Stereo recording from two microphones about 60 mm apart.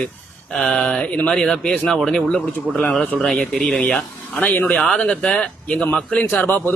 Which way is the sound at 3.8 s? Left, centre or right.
Left.